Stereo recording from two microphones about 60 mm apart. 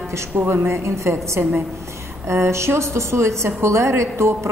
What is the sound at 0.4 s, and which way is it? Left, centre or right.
Speech, right.